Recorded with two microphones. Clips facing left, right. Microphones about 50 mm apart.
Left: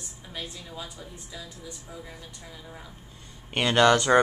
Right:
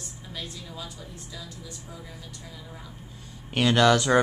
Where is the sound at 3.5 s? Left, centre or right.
Centre.